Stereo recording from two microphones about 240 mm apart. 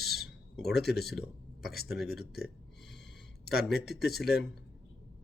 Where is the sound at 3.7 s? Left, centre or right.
Left.